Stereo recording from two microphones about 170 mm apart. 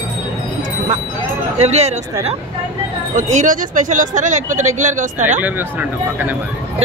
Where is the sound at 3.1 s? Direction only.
45° right (ahead or behind).